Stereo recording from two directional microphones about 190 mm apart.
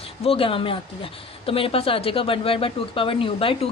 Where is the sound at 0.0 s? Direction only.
30° left (ahead or behind).